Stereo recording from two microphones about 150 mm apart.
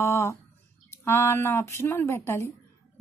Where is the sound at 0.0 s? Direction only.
15° left (ahead or behind).